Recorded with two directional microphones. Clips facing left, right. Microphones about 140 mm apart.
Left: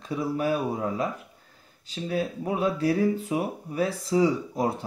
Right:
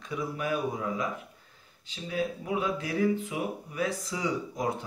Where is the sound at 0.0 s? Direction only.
30° left (ahead or behind).